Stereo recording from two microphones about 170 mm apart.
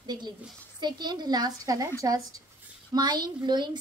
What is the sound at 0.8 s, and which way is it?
A woman's voice, 25° right (ahead or behind).